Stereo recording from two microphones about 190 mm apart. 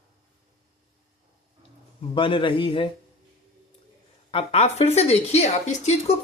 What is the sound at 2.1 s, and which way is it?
Speech, 25° left (ahead or behind).